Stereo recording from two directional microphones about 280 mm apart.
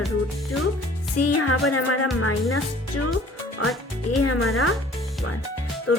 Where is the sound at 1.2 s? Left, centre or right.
Left.